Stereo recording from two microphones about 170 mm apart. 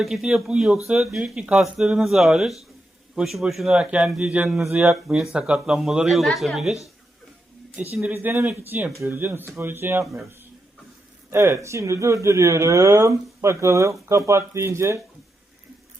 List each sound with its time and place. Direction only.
0.0 s speech: centre (ahead or behind)
7.9 s speech: 10° right (ahead or behind)
11.3 s speech: 15° right (ahead or behind)